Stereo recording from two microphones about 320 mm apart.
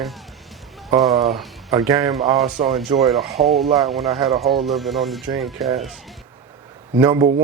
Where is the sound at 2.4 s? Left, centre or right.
Right.